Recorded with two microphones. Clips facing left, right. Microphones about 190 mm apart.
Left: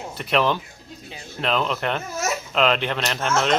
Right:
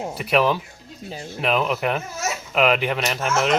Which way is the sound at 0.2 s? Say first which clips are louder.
Right 1 dB; 5° right (ahead or behind).